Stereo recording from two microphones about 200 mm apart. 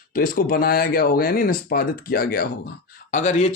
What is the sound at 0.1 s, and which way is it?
Speech, 45° left (ahead or behind).